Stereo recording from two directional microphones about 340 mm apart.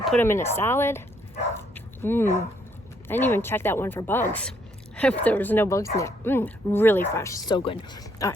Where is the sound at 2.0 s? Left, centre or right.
Centre.